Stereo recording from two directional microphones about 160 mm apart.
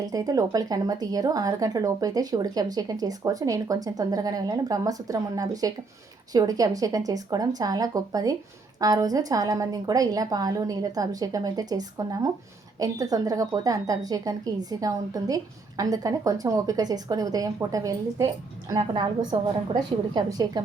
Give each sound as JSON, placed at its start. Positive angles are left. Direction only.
{"t": 0.0, "sound": "a woman's voice", "side_deg": -20}
{"t": 19.3, "sound": "a woman's voice", "side_deg": -30}